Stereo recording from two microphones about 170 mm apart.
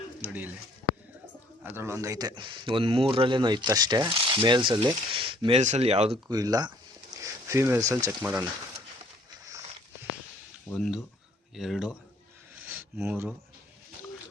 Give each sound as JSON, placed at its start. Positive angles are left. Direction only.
{"t": 0.2, "sound": "bird", "side_deg": -10}
{"t": 1.6, "sound": "speech", "side_deg": -15}
{"t": 6.2, "sound": "speech", "side_deg": -20}
{"t": 10.7, "sound": "speech", "side_deg": 5}
{"t": 12.5, "sound": "a sound", "side_deg": -10}